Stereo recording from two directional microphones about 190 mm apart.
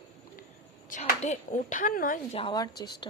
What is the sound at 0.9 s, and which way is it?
Speech, 40° left (ahead or behind).